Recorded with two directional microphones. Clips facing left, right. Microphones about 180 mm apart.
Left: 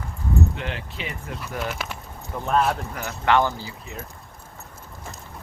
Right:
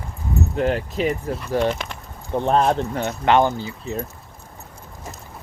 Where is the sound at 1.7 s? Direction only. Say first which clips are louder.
Right 2 dB; 10° left (ahead or behind).